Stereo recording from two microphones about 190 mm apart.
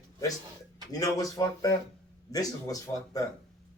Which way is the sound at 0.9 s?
20° left (ahead or behind).